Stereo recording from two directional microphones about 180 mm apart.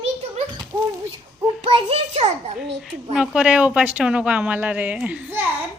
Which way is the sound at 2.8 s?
5° right (ahead or behind).